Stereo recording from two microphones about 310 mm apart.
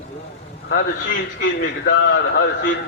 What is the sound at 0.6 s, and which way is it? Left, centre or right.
A man's voice, left.